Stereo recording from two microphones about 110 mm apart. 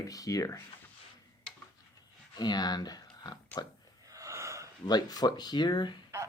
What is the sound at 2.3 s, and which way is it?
Speech, 40° left (ahead or behind).